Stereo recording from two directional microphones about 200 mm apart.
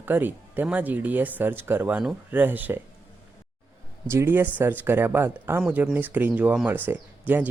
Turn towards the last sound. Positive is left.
turn(degrees=-10)  # may be behind; listen again after turning